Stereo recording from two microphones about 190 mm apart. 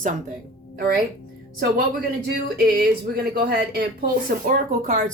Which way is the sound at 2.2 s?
55° right (ahead or behind).